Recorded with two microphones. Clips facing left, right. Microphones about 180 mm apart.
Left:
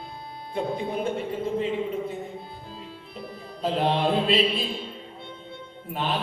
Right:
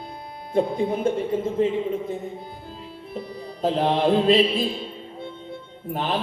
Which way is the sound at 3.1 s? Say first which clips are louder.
Right 6 dB; 45° right (ahead or behind).